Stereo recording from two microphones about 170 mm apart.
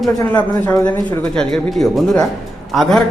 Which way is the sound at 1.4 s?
Centre (ahead or behind).